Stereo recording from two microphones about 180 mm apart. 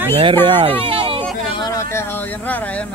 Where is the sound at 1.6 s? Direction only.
20° left (ahead or behind).